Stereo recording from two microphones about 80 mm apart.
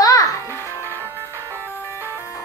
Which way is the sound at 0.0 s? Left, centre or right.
Left.